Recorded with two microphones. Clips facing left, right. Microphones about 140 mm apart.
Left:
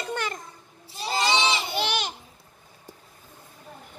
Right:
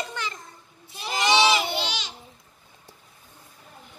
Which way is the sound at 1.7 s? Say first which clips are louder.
Left 3 dB; 55° left (ahead or behind).